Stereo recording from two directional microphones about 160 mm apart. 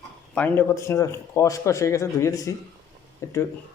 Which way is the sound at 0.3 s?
10° left (ahead or behind).